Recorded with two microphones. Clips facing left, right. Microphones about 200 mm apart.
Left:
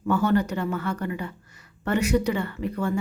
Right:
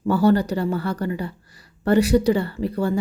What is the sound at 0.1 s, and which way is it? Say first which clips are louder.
Speech: right 4 dB; 35° right (ahead or behind).